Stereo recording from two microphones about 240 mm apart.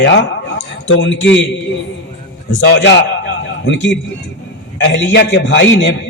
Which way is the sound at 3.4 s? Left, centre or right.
Left.